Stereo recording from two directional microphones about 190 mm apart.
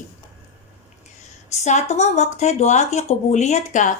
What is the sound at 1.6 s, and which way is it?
A woman's voice, 35° left (ahead or behind).